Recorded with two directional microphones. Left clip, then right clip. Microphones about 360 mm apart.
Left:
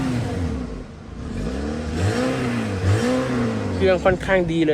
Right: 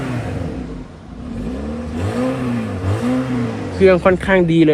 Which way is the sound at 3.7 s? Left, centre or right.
Centre.